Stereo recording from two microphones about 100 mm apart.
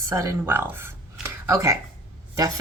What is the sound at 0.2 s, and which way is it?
Speech, 25° right (ahead or behind).